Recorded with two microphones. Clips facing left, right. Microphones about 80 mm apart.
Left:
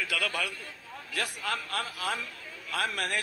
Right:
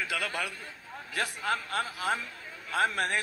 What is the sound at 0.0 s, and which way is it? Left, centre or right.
A man's voice, right.